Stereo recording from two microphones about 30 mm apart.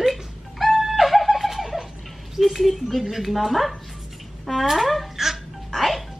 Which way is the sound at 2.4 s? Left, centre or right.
Centre.